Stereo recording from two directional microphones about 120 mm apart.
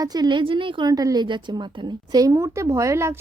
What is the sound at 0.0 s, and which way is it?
A woman's voice, 35° right (ahead or behind).